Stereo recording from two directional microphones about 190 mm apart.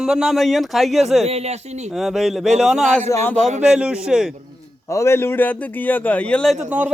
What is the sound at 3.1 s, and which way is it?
Speech, 10° left (ahead or behind).